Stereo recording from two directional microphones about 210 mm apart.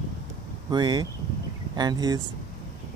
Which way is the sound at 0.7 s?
20° right (ahead or behind).